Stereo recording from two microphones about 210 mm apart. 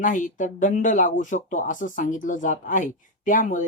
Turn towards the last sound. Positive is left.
turn(degrees=35)  # may be behind; listen again after turning